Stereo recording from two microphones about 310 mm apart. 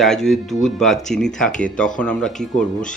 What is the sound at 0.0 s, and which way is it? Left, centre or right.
Speech, centre.